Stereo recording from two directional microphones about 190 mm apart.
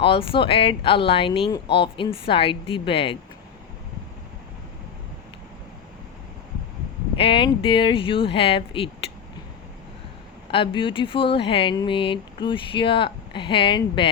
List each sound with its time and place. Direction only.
0.0 s speech: 30° left (ahead or behind)
7.2 s speech: 25° left (ahead or behind)
10.5 s speech: 25° left (ahead or behind)